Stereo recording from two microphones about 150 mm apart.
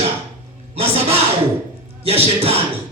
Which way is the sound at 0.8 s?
40° right (ahead or behind).